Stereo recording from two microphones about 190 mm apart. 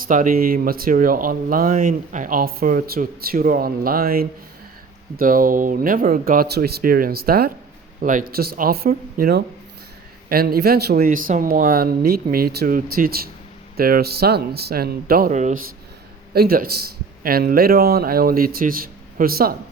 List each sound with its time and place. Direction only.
0.0 s speech: 45° right (ahead or behind)
16.3 s speech: 50° right (ahead or behind)